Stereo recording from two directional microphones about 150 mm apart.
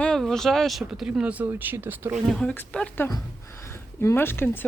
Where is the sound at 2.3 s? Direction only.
5° left (ahead or behind).